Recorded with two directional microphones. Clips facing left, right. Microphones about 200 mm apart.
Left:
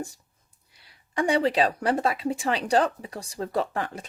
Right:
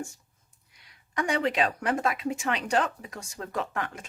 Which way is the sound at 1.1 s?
30° left (ahead or behind).